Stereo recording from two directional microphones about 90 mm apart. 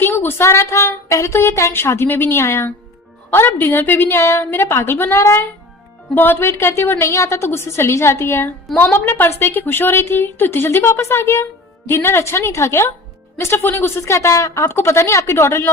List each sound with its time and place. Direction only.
0.0 s a woman's voice: 25° left (ahead or behind)